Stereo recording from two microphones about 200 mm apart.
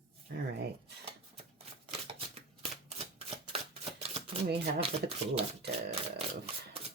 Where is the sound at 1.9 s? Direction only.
30° right (ahead or behind).